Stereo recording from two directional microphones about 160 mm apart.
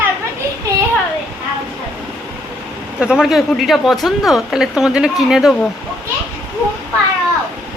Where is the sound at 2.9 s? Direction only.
5° right (ahead or behind).